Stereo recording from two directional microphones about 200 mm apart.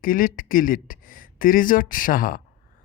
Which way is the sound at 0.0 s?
45° left (ahead or behind).